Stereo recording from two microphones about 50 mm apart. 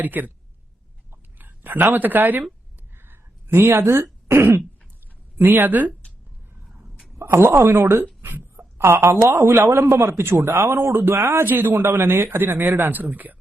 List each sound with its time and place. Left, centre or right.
0.0 s speech: right
1.1 s a sound: right
3.8 s speech: right
5.4 s speech: right
7.3 s a woman's voice: right
8.2 s a sound: right
9.5 s a man's voice: right
10.9 s speech: right
11.8 s speech: right